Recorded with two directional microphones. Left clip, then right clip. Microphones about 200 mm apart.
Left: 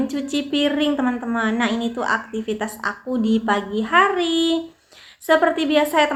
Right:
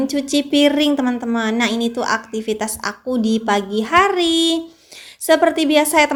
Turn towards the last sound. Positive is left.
turn(degrees=-45)  # may be behind; listen again after turning